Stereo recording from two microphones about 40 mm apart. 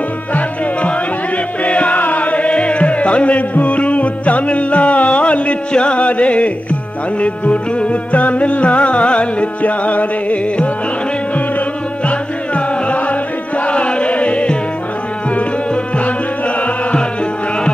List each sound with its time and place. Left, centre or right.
1.6 s music: left
12.1 s music: left
15.3 s tabla: left